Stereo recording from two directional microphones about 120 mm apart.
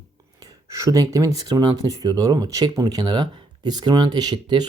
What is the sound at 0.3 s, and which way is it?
Speech, 30° right (ahead or behind).